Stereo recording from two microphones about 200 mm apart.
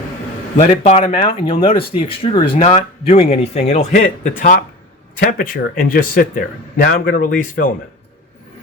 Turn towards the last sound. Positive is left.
turn(degrees=45)  # may be behind; listen again after turning